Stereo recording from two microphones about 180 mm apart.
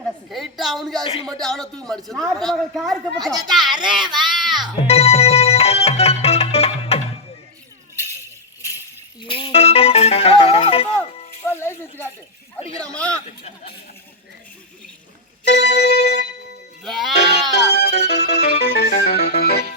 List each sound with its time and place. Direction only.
0.0 s a woman's voice: centre (ahead or behind)
4.4 s music: centre (ahead or behind)
4.8 s music: 35° left (ahead or behind)
9.2 s music: 25° left (ahead or behind)
11.5 s a woman's voice: 15° left (ahead or behind)
15.4 s music: 65° left (ahead or behind)
16.8 s a woman's voice: centre (ahead or behind)
17.6 s music: 70° left (ahead or behind)